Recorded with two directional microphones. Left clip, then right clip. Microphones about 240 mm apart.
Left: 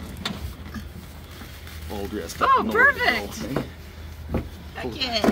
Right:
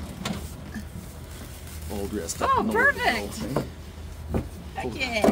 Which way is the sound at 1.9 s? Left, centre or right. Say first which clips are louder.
Even; centre.